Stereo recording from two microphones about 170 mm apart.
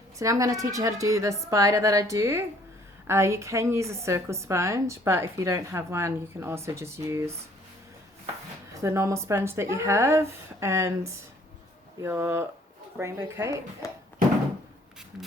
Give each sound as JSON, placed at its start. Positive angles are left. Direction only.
{"t": 0.2, "sound": "a woman's voice", "side_deg": -20}
{"t": 8.7, "sound": "a woman's voice", "side_deg": -15}
{"t": 13.8, "sound": "a sound", "side_deg": 20}